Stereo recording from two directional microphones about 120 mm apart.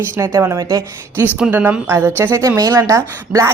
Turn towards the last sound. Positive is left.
turn(degrees=-25)  # may be behind; listen again after turning